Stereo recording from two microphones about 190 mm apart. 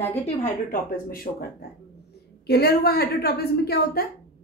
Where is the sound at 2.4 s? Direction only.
55° left (ahead or behind).